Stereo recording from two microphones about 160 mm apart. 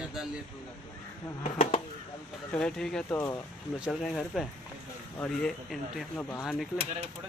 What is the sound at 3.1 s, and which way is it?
Speech, 20° left (ahead or behind).